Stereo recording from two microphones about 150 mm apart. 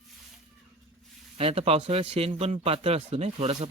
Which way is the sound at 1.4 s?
40° right (ahead or behind).